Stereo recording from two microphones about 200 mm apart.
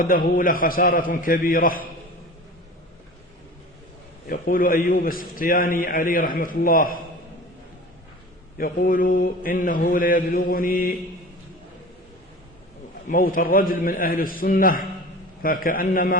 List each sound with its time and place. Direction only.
0.0 s a man's voice: 45° left (ahead or behind)
4.3 s a man's voice: 45° left (ahead or behind)
8.5 s a man's voice: 45° left (ahead or behind)
13.1 s a man's voice: 40° left (ahead or behind)